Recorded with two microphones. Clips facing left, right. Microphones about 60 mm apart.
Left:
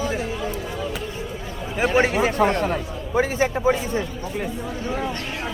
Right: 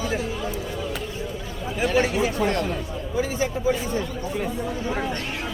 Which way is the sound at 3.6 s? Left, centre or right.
Left.